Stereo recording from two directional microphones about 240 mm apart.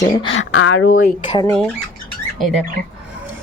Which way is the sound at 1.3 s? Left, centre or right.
Centre.